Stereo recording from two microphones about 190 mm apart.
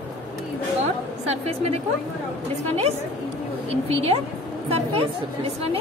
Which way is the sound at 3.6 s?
30° right (ahead or behind).